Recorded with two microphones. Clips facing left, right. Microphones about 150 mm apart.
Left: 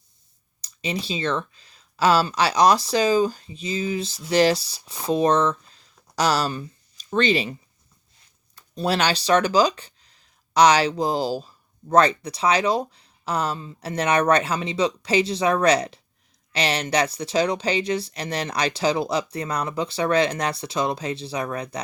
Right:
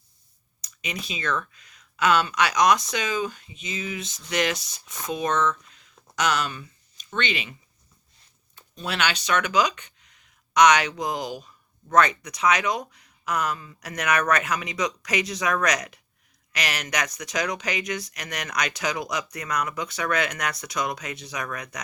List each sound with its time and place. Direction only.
0.6 s speech: 30° left (ahead or behind)
8.7 s speech: 35° left (ahead or behind)